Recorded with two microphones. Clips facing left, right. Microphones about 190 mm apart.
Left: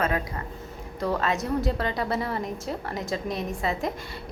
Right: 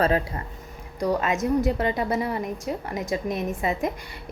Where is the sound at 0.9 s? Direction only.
15° right (ahead or behind).